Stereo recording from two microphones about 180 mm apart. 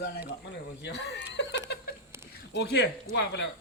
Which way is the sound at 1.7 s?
65° left (ahead or behind).